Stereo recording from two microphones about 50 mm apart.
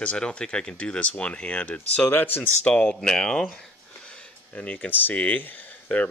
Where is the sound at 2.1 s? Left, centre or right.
Left.